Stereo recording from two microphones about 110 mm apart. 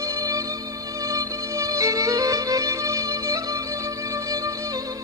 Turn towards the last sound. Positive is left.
turn(degrees=-30)  # may be behind; listen again after turning